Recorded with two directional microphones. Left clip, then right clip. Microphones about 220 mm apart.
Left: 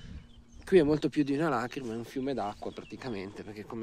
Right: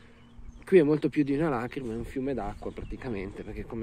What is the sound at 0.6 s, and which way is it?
Speech, 20° left (ahead or behind).